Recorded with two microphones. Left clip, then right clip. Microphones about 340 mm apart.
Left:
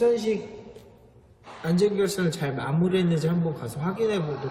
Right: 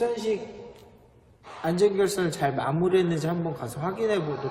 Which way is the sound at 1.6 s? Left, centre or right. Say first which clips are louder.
Right 1 dB; centre.